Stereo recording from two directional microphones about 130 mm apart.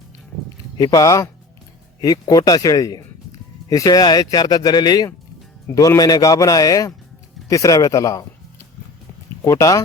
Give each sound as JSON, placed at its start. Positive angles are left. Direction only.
{"t": 0.8, "sound": "a man's voice", "side_deg": 30}